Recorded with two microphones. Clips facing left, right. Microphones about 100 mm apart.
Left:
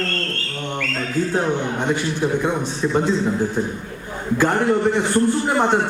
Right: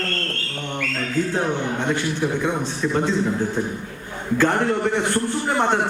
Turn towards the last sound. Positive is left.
turn(degrees=15)  # may be behind; listen again after turning